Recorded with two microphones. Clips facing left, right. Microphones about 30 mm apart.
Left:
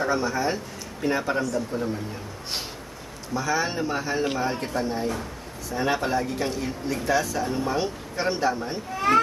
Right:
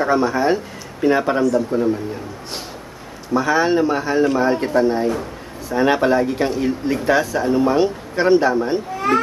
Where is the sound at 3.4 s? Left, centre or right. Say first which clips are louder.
Right 9 dB; right.